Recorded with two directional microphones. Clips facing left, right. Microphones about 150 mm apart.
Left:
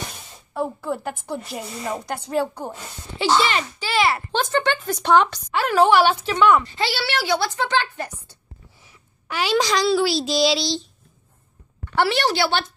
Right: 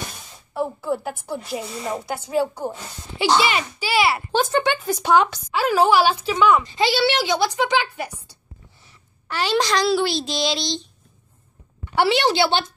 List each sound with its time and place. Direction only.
0.6 s speech: 5° right (ahead or behind)
6.6 s speech: 15° right (ahead or behind)
8.8 s a sound: 10° left (ahead or behind)
9.8 s child singing: centre (ahead or behind)
11.9 s speech: 15° right (ahead or behind)